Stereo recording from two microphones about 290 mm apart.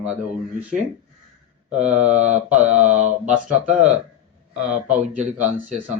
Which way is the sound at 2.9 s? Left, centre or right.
Right.